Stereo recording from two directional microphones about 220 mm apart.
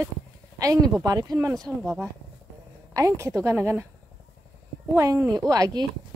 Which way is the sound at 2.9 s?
15° right (ahead or behind).